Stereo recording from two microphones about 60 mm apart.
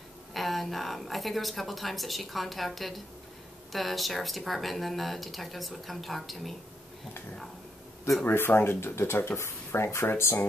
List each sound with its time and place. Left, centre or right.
0.3 s a woman's voice: centre
8.3 s speech: left